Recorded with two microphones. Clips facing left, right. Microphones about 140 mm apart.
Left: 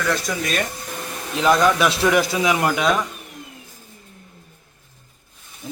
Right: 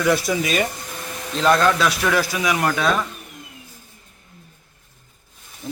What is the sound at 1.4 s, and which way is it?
A man's voice, 15° left (ahead or behind).